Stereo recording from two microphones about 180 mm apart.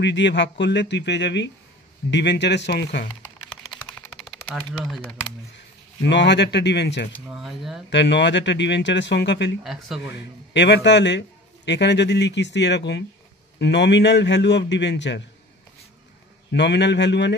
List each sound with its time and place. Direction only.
0.0 s a man's voice: 80° left
3.4 s typewriter: 5° left (ahead or behind)
4.9 s speech: 10° left (ahead or behind)
6.0 s a man's voice: 75° left (ahead or behind)
7.2 s speech: centre (ahead or behind)
7.9 s a man's voice: 75° left (ahead or behind)
9.6 s speech: centre (ahead or behind)
10.0 s a man's voice: 75° left (ahead or behind)
16.5 s a man's voice: 75° left (ahead or behind)